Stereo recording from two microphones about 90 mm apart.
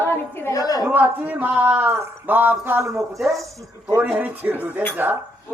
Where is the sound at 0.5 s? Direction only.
45° left (ahead or behind).